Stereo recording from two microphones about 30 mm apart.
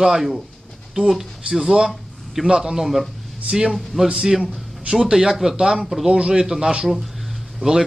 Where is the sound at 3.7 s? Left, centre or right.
Centre.